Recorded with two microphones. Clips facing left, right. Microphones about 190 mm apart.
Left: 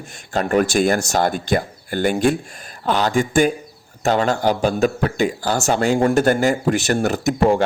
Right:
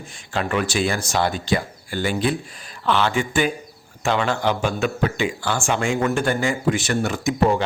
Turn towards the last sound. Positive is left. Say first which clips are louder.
# left 3 dB
turn(degrees=45)  # may be behind; listen again after turning